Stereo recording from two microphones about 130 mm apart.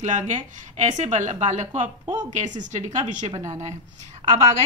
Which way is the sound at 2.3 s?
75° right (ahead or behind).